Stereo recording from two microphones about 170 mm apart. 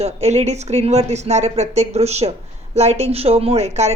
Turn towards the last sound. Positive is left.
turn(degrees=-40)  # may be behind; listen again after turning